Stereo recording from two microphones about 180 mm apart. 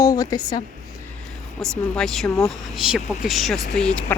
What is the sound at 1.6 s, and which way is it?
Speech, 5° left (ahead or behind).